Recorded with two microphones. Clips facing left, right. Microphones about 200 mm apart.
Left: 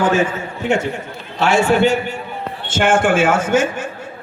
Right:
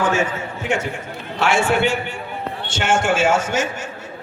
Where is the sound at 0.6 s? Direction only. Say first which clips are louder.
Left 5 dB; 40° left (ahead or behind).